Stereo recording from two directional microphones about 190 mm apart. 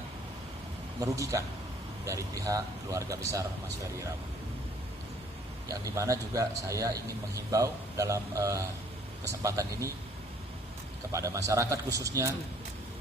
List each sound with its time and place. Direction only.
0.9 s a man's voice: 15° right (ahead or behind)
5.6 s a man's voice: 15° right (ahead or behind)
11.1 s a man's voice: 15° right (ahead or behind)